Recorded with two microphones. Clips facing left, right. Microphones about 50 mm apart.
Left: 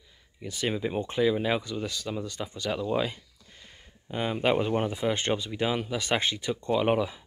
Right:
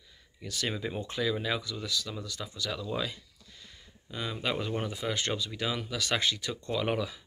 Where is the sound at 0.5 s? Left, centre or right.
Left.